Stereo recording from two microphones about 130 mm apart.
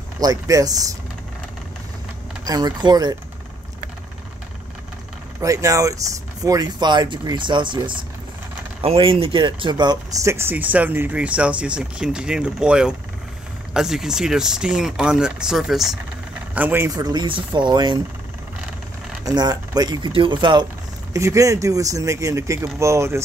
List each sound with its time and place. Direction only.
0.2 s speech: 30° right (ahead or behind)
2.4 s speech: 30° right (ahead or behind)
5.4 s speech: 25° right (ahead or behind); by 16.0 s centre (ahead or behind)
16.5 s speech: 15° right (ahead or behind)
16.9 s speech: 30° right (ahead or behind)
19.2 s speech: 30° right (ahead or behind)
21.1 s speech: 25° right (ahead or behind)